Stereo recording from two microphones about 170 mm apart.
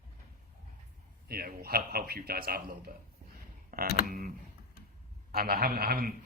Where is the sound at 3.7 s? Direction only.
60° right (ahead or behind).